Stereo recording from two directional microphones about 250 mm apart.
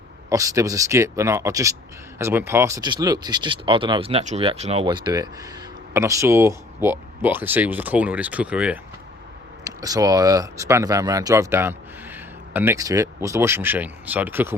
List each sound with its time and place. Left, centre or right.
0.3 s speech: centre